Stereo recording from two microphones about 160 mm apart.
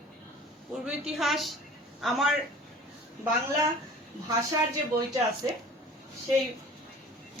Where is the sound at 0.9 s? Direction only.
Centre (ahead or behind).